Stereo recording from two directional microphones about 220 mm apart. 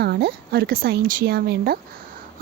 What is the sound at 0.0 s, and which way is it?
A woman's voice, 45° right (ahead or behind).